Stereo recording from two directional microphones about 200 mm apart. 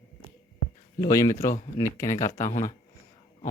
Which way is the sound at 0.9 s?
15° left (ahead or behind).